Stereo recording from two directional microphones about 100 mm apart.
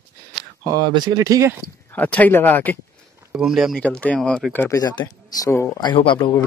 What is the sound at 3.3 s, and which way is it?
Speech, 5° right (ahead or behind).